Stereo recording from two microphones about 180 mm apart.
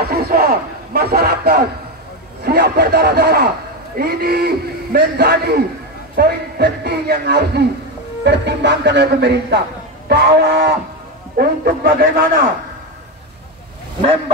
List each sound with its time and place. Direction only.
0.1 s a man's voice: 55° right (ahead or behind)